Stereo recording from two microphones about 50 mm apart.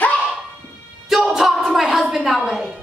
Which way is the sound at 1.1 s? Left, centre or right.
Centre.